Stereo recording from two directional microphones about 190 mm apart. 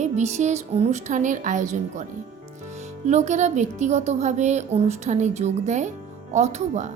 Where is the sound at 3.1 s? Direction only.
40° right (ahead or behind).